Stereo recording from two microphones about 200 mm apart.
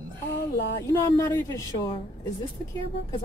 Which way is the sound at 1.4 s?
15° left (ahead or behind).